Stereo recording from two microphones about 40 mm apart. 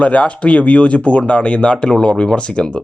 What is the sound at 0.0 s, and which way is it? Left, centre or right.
Speech, left.